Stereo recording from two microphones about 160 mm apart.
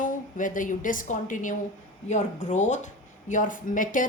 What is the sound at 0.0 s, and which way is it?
A woman's voice, 55° left (ahead or behind).